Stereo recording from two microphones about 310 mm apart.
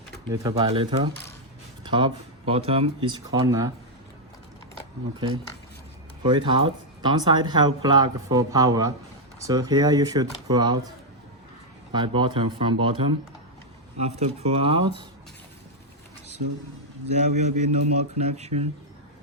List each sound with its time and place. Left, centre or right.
0.3 s speech: centre
5.2 s speech: centre
11.9 s speech: centre
17.2 s a man's voice: right